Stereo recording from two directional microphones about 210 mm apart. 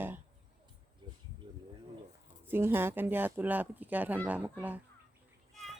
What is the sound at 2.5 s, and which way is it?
Speech, 10° right (ahead or behind).